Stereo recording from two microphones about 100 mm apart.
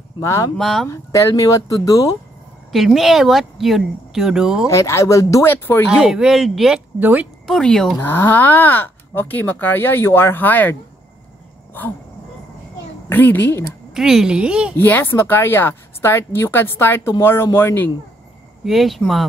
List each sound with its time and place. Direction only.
0.2 s speech: 30° left (ahead or behind)
0.6 s speech: centre (ahead or behind)
0.8 s speech: 25° left (ahead or behind)
2.7 s speech: centre (ahead or behind)
4.6 s speech: 30° left (ahead or behind)
5.9 s speech: 10° right (ahead or behind)
7.0 s speech: 20° right (ahead or behind)
7.4 s speech: 5° left (ahead or behind)
8.0 s speech: 20° left (ahead or behind)
13.1 s speech: 20° left (ahead or behind)
13.9 s speech: 5° right (ahead or behind)
14.8 s speech: 20° left (ahead or behind)
18.6 s speech: centre (ahead or behind)